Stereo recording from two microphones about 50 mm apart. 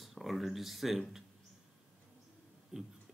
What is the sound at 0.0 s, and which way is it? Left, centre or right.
Speech, centre.